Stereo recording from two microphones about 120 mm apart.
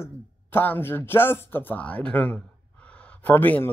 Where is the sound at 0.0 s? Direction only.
15° left (ahead or behind).